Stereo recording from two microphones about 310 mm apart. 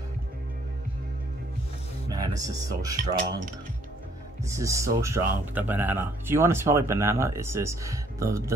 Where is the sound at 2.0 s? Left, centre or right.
Centre.